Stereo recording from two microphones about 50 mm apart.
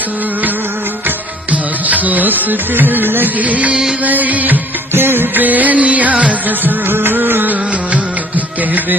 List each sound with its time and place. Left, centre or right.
1.9 s music: right
3.4 s music: right
4.9 s music: right
6.8 s music: right